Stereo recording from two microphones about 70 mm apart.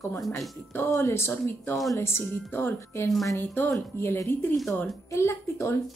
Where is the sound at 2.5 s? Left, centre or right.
Left.